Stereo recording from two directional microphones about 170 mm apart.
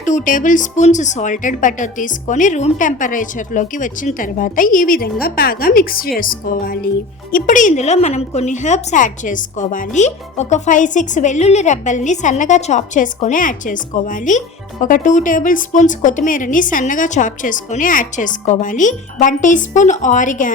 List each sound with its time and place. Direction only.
0.0 s a woman's voice: 45° left (ahead or behind)